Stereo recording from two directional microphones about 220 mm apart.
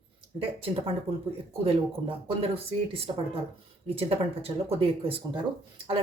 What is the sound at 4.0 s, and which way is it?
Speech, 25° right (ahead or behind).